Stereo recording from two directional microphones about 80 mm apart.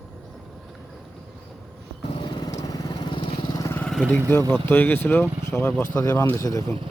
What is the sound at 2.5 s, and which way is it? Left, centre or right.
Lawn mower, left.